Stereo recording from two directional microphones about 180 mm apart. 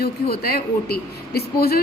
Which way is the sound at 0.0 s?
60° left (ahead or behind).